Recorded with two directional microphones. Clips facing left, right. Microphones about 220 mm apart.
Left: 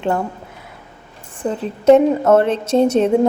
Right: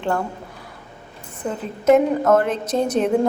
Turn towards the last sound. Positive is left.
turn(degrees=25)  # may be behind; listen again after turning